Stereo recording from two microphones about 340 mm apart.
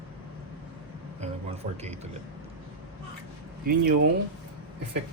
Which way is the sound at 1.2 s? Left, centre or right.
Centre.